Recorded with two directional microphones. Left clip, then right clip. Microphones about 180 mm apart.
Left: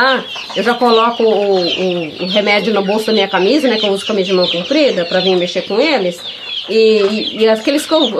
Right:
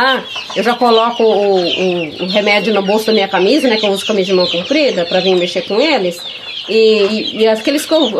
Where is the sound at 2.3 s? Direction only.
15° right (ahead or behind).